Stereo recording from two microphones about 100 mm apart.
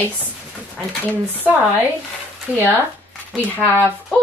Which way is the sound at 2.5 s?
15° right (ahead or behind).